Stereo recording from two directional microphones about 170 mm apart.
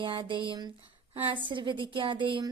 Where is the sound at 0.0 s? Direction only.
30° right (ahead or behind).